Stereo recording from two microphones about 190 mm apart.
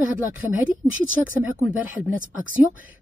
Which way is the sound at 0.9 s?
45° right (ahead or behind).